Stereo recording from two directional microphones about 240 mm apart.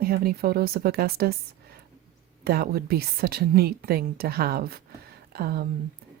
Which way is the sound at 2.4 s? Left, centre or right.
Right.